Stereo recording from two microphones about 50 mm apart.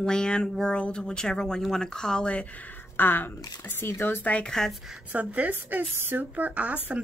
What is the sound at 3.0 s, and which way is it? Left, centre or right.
Speech, left.